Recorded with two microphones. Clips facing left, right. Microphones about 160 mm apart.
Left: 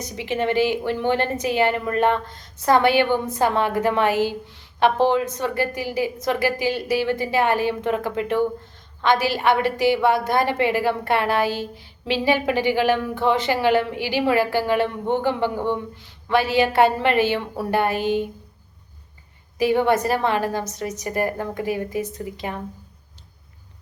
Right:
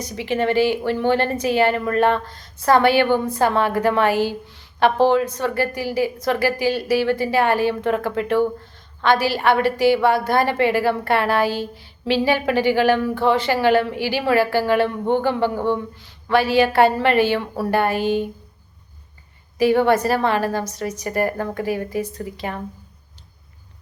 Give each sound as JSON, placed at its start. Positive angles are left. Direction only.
{"t": 0.0, "sound": "a woman's voice", "side_deg": 20}
{"t": 19.5, "sound": "a woman's voice", "side_deg": 20}